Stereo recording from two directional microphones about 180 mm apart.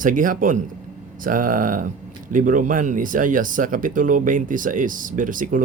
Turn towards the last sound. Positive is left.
turn(degrees=-45)  # may be behind; listen again after turning